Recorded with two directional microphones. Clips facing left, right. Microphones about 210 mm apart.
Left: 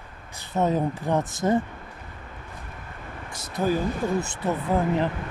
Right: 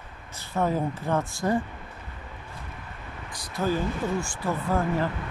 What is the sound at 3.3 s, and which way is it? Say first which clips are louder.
Speech: left 2 dB; 25° left (ahead or behind).